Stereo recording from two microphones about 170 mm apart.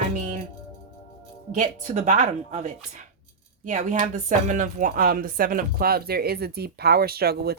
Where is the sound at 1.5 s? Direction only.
45° right (ahead or behind).